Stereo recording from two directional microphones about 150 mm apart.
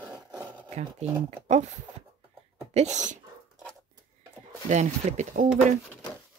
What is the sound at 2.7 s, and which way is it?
Speech, 50° right (ahead or behind).